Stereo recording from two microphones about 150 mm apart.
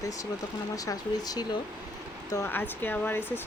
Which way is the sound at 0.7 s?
25° left (ahead or behind).